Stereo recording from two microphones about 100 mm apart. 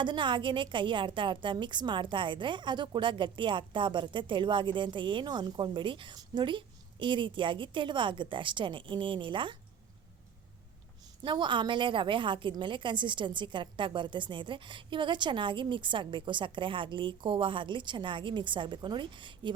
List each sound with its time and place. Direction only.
0.0 s a woman's voice: 50° right (ahead or behind)
11.2 s a woman's voice: 50° right (ahead or behind)